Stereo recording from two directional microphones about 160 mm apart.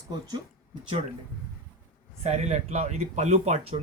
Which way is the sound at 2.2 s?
45° right (ahead or behind).